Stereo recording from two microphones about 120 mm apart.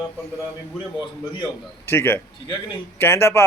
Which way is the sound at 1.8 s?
20° left (ahead or behind).